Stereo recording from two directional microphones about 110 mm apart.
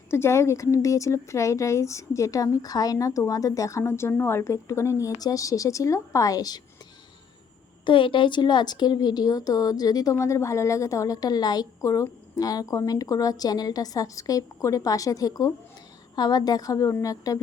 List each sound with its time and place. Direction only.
0.1 s speech: 25° left (ahead or behind)
7.9 s speech: 50° left (ahead or behind); by 17.4 s 30° left (ahead or behind)